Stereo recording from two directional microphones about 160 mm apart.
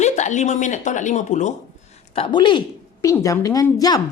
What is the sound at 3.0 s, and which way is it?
A woman's voice, 20° left (ahead or behind).